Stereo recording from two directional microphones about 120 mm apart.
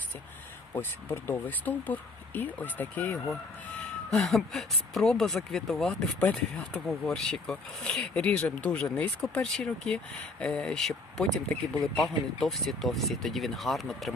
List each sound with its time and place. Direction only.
0.7 s speech: 20° left (ahead or behind)
4.1 s speech: centre (ahead or behind)